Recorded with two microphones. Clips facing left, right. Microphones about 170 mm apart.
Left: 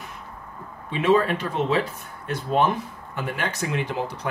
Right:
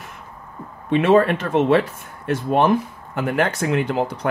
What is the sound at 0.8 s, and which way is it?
Speech, 60° right (ahead or behind).